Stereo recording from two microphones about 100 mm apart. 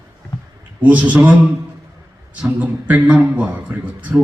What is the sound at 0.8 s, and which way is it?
Speech, 15° right (ahead or behind).